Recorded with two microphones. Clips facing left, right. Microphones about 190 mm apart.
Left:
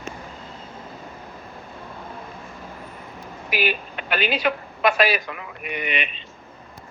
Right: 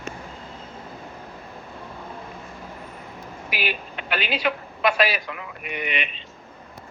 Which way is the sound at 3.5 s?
50° left (ahead or behind).